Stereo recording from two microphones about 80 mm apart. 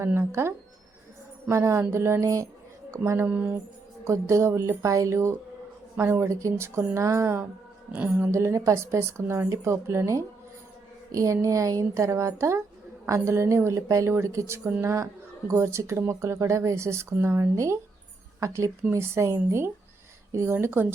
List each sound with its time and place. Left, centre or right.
0.0 s speech: right
3.2 s speech: centre
4.0 s speech: right
7.9 s a woman's voice: centre
8.3 s speech: right
11.1 s a sound: right
11.4 s a woman's voice: right